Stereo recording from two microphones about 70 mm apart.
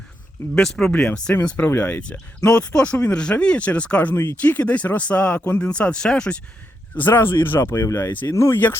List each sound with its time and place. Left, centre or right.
0.5 s speech: centre
1.5 s speech: left
4.1 s speech: left
4.4 s speech: left
6.9 s speech: left
7.8 s speech: left